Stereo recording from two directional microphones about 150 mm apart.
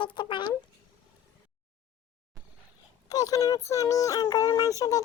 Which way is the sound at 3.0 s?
25° left (ahead or behind).